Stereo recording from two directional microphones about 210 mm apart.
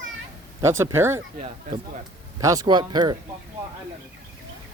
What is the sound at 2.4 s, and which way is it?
Speech, 15° right (ahead or behind).